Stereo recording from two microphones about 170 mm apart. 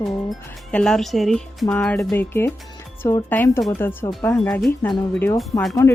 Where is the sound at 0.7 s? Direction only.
5° left (ahead or behind).